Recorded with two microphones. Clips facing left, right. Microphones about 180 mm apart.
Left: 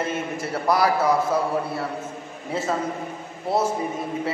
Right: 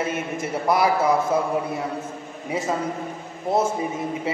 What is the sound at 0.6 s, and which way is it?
Speech, 20° right (ahead or behind).